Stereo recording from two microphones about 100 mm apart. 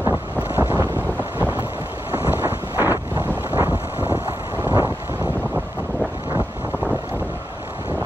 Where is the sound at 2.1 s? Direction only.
20° right (ahead or behind).